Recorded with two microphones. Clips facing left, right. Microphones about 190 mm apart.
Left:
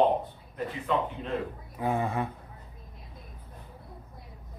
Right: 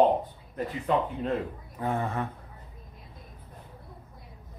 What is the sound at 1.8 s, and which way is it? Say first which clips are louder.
Speech: left 1 dB; 10° left (ahead or behind).